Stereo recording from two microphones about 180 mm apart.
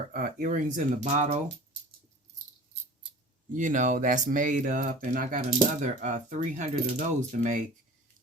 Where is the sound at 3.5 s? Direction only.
45° right (ahead or behind).